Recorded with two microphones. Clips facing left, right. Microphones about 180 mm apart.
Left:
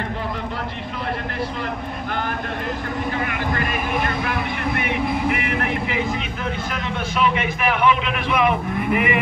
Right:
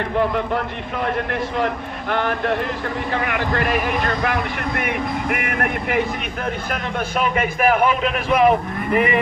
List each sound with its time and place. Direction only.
3.1 s a man's voice: 60° right (ahead or behind); by 9.2 s 40° right (ahead or behind)